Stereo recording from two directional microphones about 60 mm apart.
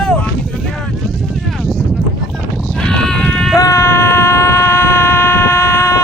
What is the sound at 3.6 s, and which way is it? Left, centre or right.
Vehicle, left.